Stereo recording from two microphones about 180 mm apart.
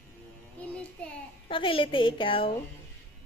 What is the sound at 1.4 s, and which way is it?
A woman's voice, 30° left (ahead or behind).